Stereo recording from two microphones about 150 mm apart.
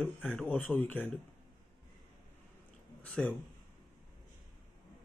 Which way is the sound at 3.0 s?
10° left (ahead or behind).